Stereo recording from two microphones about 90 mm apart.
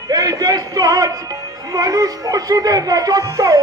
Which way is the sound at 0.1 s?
40° right (ahead or behind).